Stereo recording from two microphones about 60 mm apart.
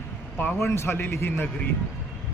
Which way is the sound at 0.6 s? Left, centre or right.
Left.